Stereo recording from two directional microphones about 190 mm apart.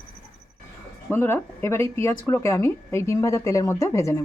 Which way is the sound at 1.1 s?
10° left (ahead or behind).